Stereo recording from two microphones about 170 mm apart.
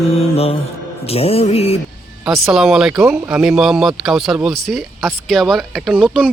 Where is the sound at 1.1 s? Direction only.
35° left (ahead or behind).